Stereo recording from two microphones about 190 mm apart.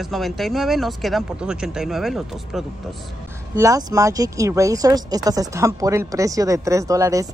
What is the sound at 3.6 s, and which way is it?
Speech, 15° right (ahead or behind).